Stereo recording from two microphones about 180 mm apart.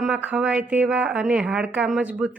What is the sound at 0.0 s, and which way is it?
A woman's voice, 5° right (ahead or behind).